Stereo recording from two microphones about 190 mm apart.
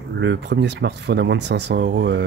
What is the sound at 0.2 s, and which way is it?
Speech, 70° right (ahead or behind).